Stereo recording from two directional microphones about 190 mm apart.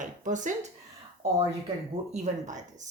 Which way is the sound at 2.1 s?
40° right (ahead or behind).